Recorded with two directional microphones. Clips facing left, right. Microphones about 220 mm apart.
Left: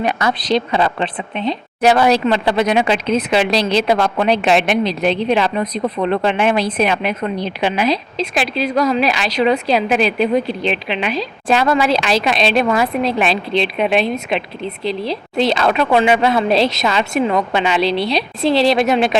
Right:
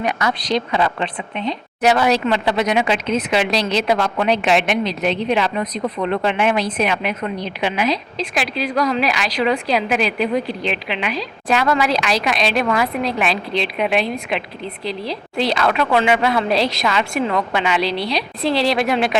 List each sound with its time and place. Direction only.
0.0 s a woman's voice: 30° left (ahead or behind)